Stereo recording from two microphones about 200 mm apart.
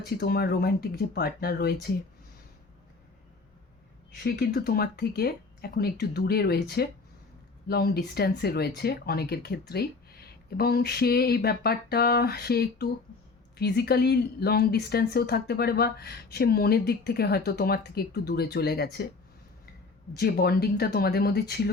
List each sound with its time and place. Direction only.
0.2 s speech: 50° left (ahead or behind)
4.2 s speech: 50° left (ahead or behind)
20.1 s speech: 50° left (ahead or behind)